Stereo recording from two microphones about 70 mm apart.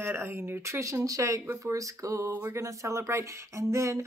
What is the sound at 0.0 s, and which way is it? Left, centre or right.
Speech, right.